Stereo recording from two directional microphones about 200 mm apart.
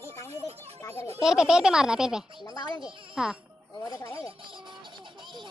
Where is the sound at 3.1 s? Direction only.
5° right (ahead or behind).